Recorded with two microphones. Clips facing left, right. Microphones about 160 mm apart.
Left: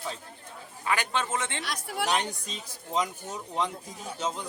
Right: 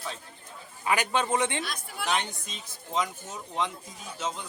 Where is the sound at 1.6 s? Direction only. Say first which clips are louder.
Left 5 dB; 75° left (ahead or behind).